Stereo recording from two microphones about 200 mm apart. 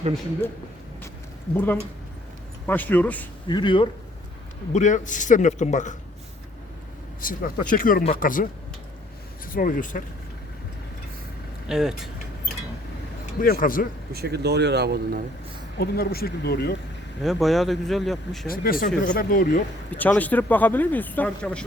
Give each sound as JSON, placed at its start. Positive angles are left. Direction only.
{"t": 1.5, "sound": "speech", "side_deg": 10}
{"t": 3.5, "sound": "speech", "side_deg": 25}
{"t": 4.7, "sound": "a man's voice", "side_deg": 40}
{"t": 7.2, "sound": "speech", "side_deg": 45}
{"t": 9.5, "sound": "speech", "side_deg": 45}
{"t": 11.7, "sound": "speech", "side_deg": 0}
{"t": 13.4, "sound": "speech", "side_deg": 45}
{"t": 14.1, "sound": "speech", "side_deg": -55}
{"t": 15.8, "sound": "speech", "side_deg": 50}
{"t": 17.2, "sound": "speech", "side_deg": 0}
{"t": 18.4, "sound": "speech", "side_deg": 45}
{"t": 19.9, "sound": "speech", "side_deg": 10}